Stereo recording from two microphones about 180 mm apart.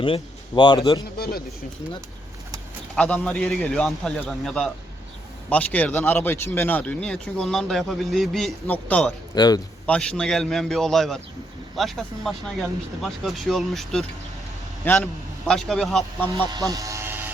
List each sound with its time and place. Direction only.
0.0 s speech: 25° left (ahead or behind)
2.9 s speech: 5° left (ahead or behind)
9.3 s a man's voice: 20° left (ahead or behind)
9.8 s speech: 5° left (ahead or behind)
14.8 s speech: 10° left (ahead or behind)
16.5 s vehicle: 20° right (ahead or behind)